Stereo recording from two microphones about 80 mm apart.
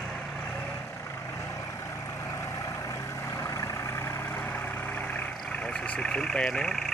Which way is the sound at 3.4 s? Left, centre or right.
Left.